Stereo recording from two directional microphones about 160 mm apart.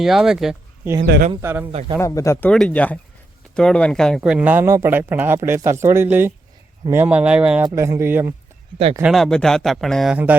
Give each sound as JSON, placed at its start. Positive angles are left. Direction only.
{"t": 0.0, "sound": "speech", "side_deg": 0}
{"t": 1.0, "sound": "speech", "side_deg": -85}
{"t": 1.4, "sound": "speech", "side_deg": -15}
{"t": 2.0, "sound": "speech", "side_deg": 20}
{"t": 2.5, "sound": "speech", "side_deg": 5}
{"t": 9.0, "sound": "speech", "side_deg": 0}